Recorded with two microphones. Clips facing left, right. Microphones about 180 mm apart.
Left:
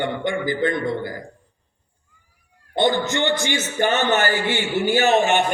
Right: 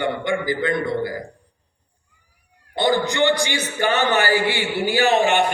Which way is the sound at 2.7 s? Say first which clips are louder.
Right 1 dB; 20° left (ahead or behind).